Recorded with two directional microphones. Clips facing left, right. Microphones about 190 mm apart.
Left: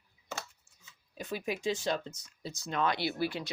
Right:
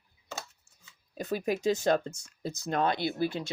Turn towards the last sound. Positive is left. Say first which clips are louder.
# right 3 dB
turn(degrees=-20)  # may be behind; listen again after turning